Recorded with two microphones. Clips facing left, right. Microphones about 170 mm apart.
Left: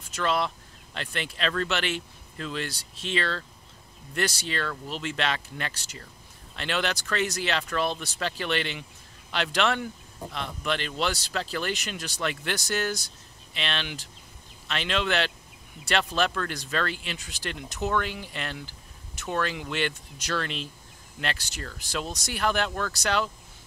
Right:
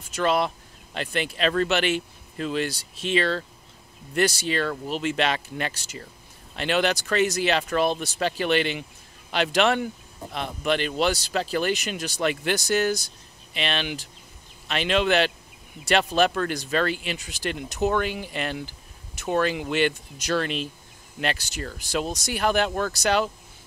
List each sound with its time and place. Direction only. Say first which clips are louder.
0.1 s speech: right 4 dB; 15° right (ahead or behind)
22.7 s speech: right 5 dB; 25° right (ahead or behind)
23.0 s speech: right 4 dB; 10° right (ahead or behind)